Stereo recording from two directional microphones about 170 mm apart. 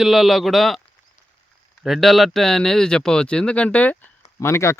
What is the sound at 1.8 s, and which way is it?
Speech, centre (ahead or behind).